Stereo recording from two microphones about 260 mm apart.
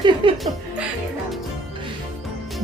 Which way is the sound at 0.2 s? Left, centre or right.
Centre.